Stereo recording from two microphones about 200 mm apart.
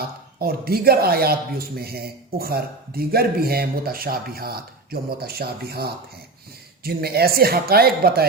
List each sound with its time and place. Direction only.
0.0 s speech: 50° right (ahead or behind)